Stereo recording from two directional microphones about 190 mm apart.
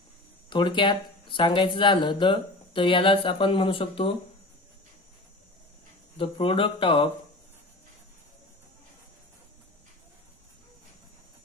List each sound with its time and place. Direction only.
0.5 s speech: 25° left (ahead or behind)
6.1 s speech: 30° left (ahead or behind)